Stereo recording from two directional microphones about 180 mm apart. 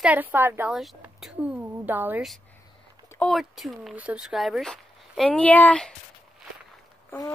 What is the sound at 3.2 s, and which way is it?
Speech, centre (ahead or behind).